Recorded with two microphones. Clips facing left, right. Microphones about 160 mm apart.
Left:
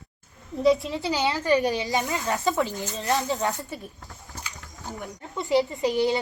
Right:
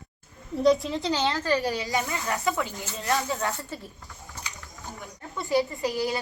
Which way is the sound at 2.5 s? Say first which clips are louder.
Left 4 dB; 35° left (ahead or behind).